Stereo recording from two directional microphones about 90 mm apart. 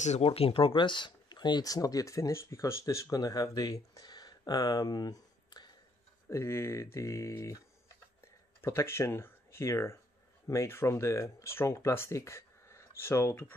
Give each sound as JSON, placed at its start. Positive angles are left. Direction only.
{"t": 0.2, "sound": "speech", "side_deg": 90}
{"t": 6.2, "sound": "speech", "side_deg": 30}